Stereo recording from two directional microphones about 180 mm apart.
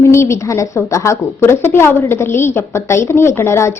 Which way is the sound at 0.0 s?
15° left (ahead or behind).